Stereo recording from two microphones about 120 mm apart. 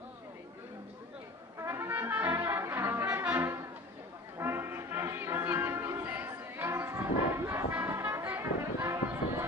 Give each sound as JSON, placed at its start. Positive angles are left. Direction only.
{"t": 1.6, "sound": "brass instrument", "side_deg": -20}
{"t": 4.4, "sound": "music", "side_deg": -20}